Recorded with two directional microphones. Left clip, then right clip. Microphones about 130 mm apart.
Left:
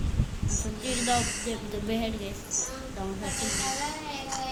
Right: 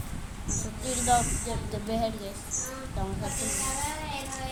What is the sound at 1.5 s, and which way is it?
Speech, 5° right (ahead or behind).